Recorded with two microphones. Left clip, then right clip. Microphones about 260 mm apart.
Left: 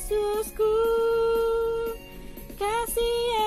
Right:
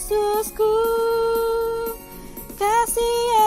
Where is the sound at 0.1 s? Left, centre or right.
Right.